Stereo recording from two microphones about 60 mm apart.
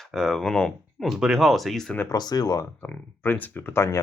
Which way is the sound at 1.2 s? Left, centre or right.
Centre.